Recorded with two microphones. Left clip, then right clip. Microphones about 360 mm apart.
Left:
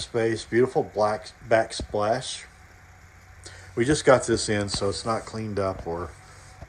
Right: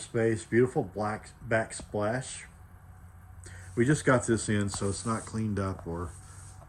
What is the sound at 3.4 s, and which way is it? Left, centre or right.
Speech, centre.